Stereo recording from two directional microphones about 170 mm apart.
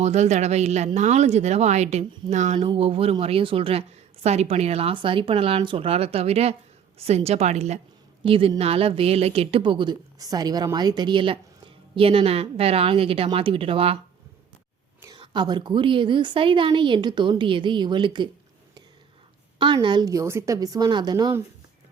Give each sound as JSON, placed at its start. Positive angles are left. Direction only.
{"t": 0.0, "sound": "a woman's voice", "side_deg": -40}
{"t": 2.6, "sound": "a woman's voice", "side_deg": -30}
{"t": 15.0, "sound": "a woman's voice", "side_deg": -25}
{"t": 19.5, "sound": "a woman's voice", "side_deg": -30}